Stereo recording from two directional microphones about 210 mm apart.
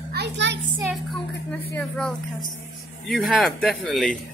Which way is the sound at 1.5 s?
5° left (ahead or behind).